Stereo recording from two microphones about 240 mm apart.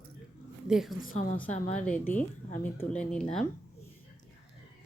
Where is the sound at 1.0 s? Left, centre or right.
Left.